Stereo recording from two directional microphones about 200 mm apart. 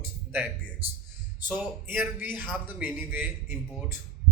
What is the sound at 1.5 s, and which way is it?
A man's voice, 10° right (ahead or behind).